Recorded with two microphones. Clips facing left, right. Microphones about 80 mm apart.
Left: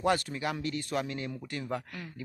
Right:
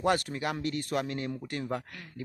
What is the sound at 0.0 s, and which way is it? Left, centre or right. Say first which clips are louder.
Speech: right 1 dB; right.